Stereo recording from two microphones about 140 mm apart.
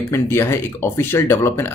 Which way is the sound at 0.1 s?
20° left (ahead or behind).